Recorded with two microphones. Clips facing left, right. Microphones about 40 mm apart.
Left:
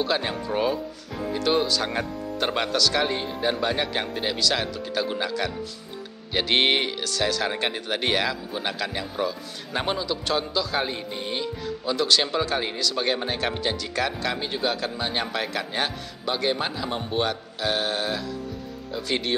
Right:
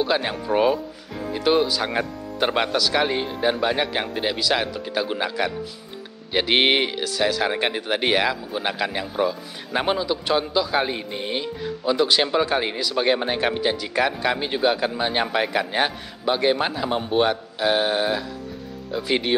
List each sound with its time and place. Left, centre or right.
0.0 s speech: centre